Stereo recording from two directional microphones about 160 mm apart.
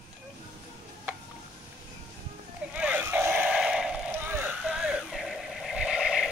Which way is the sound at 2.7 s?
10° right (ahead or behind).